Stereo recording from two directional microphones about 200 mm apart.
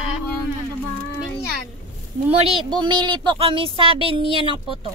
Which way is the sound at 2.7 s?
20° right (ahead or behind).